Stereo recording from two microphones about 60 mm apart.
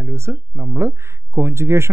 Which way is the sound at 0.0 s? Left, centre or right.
Right.